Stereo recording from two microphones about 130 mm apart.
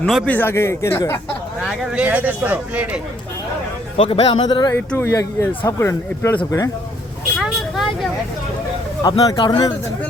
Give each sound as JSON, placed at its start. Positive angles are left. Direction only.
{"t": 0.3, "sound": "speech", "side_deg": 15}
{"t": 1.6, "sound": "speech", "side_deg": -5}
{"t": 3.9, "sound": "a man's voice", "side_deg": 50}
{"t": 4.4, "sound": "speech", "side_deg": 35}
{"t": 4.9, "sound": "speech", "side_deg": 20}
{"t": 7.3, "sound": "vehicle", "side_deg": -5}
{"t": 9.0, "sound": "speech", "side_deg": 30}